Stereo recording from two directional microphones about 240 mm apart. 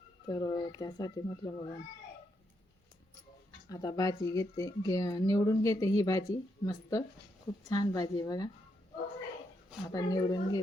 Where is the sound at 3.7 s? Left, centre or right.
Centre.